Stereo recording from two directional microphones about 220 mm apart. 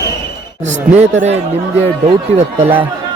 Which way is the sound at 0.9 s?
30° right (ahead or behind).